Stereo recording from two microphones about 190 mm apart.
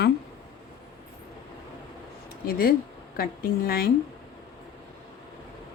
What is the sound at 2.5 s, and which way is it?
Speech, 50° left (ahead or behind).